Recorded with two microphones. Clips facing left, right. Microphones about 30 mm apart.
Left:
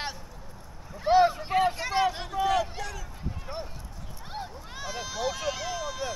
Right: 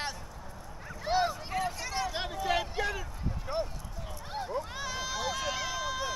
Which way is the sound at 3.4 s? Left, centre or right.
Centre.